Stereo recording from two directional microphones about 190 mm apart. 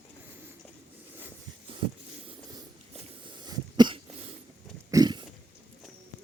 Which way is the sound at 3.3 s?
25° right (ahead or behind).